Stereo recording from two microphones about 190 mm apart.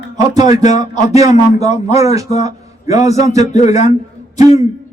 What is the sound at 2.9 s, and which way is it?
Speech, 35° left (ahead or behind).